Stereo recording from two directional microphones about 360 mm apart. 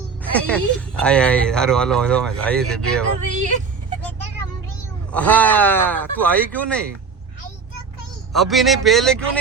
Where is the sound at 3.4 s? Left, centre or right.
Right.